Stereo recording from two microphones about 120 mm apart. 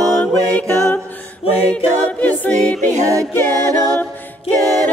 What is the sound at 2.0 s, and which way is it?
A capella, 15° left (ahead or behind).